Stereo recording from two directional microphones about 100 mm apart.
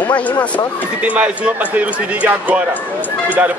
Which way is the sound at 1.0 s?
15° right (ahead or behind).